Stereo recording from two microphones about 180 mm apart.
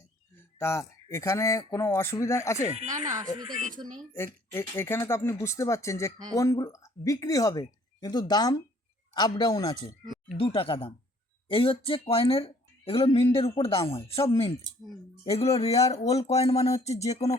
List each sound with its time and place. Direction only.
0.6 s speech: 15° left (ahead or behind)
3.1 s speech: 20° right (ahead or behind)
4.5 s a woman's voice: 15° left (ahead or behind); by 17.3 s 35° left (ahead or behind)